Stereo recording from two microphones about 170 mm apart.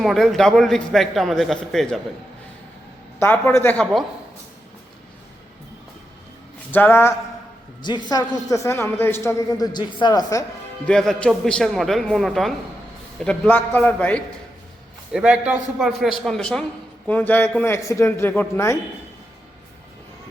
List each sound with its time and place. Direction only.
0.0 s a man's voice: centre (ahead or behind)
3.2 s a man's voice: 15° left (ahead or behind)
6.7 s a sound: 10° left (ahead or behind)
7.8 s a man's voice: 25° left (ahead or behind)
10.8 s a man's voice: 5° left (ahead or behind)
15.1 s a man's voice: 5° right (ahead or behind); by 18.8 s 15° left (ahead or behind)